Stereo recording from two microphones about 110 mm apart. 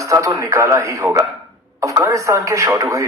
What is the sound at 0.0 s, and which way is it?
Speech, 30° right (ahead or behind).